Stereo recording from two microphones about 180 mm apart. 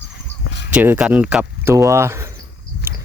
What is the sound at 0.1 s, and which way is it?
Fowl, 70° left (ahead or behind).